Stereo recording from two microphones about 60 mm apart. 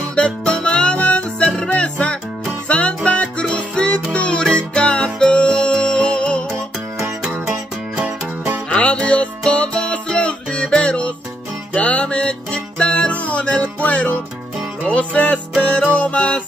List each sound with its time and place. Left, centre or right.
0.1 s music: centre
7.9 s music: right
8.6 s music: centre